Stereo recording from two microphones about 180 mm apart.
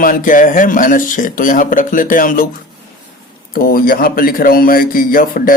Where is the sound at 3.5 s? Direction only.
55° left (ahead or behind).